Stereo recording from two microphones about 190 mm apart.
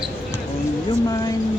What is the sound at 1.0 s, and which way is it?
Speech, 20° left (ahead or behind).